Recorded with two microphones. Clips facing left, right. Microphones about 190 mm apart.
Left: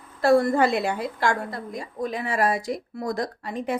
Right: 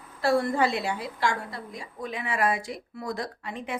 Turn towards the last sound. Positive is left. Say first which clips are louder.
# left 6 dB
turn(degrees=40)  # may be behind; listen again after turning